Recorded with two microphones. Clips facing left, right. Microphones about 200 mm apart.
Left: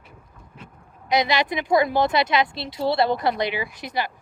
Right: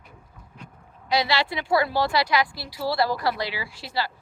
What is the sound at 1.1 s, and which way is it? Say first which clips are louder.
Speech: left 3 dB; 20° left (ahead or behind).